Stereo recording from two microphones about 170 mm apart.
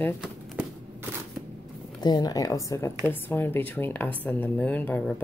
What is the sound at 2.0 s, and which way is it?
Speech, 25° left (ahead or behind).